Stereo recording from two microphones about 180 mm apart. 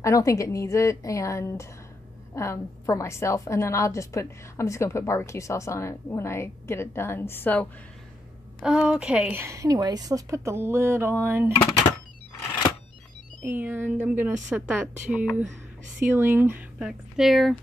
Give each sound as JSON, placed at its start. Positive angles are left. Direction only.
{"t": 0.0, "sound": "a woman's voice", "side_deg": 15}
{"t": 8.6, "sound": "a woman's voice", "side_deg": -5}
{"t": 13.4, "sound": "a woman's voice", "side_deg": -10}